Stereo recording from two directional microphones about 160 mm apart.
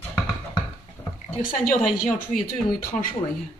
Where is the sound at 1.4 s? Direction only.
60° left (ahead or behind).